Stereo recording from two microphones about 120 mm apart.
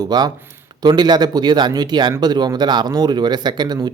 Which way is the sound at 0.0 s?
35° right (ahead or behind).